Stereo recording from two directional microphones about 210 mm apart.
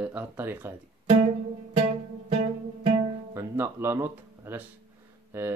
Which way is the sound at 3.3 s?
10° right (ahead or behind).